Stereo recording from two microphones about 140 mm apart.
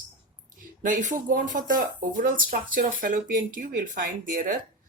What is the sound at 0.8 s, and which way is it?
Speech, 65° right (ahead or behind).